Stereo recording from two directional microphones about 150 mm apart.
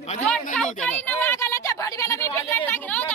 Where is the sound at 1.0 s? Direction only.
15° left (ahead or behind).